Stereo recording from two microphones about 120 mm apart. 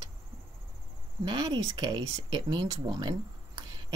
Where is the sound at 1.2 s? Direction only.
35° right (ahead or behind).